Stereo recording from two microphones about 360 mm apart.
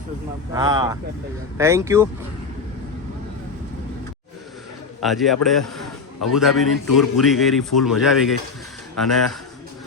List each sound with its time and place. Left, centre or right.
0.5 s speech: centre
4.9 s speech: centre